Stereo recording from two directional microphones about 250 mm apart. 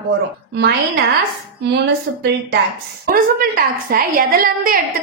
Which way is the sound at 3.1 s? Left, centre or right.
Right.